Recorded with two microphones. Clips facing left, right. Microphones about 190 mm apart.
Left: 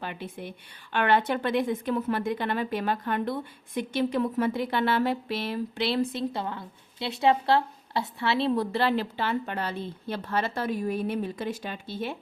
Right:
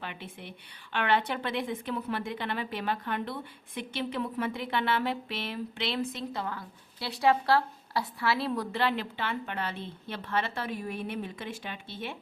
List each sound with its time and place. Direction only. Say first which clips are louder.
0.0 s a woman's voice: left 5 dB; 40° left (ahead or behind)